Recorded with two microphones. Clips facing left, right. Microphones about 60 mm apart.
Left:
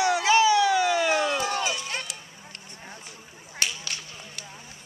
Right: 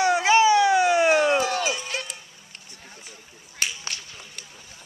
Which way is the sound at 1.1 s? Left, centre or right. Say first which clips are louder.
Right 5 dB; right.